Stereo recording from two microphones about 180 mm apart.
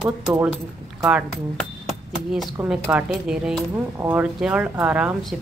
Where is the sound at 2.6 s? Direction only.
10° right (ahead or behind).